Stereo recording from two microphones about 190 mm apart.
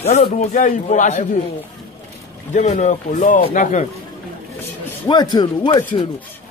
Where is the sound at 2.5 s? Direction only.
40° left (ahead or behind).